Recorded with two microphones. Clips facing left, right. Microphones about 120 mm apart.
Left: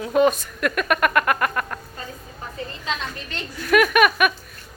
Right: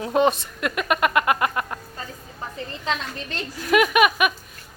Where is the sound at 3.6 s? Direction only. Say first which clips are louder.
Left 1 dB; 20° right (ahead or behind).